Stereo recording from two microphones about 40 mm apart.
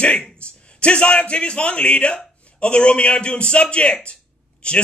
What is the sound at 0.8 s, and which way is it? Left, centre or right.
A man's voice, left.